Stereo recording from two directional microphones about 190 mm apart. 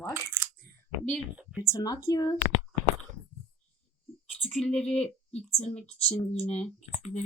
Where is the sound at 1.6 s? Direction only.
20° left (ahead or behind).